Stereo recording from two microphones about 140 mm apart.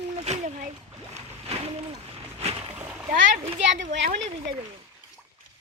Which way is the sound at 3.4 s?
50° right (ahead or behind).